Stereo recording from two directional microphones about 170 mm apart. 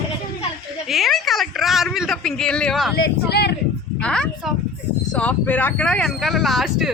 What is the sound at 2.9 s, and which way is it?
Speech, 70° left (ahead or behind).